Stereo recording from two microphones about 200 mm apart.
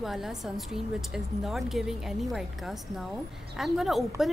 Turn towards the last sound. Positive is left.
turn(degrees=0)  # may be behind; listen again after turning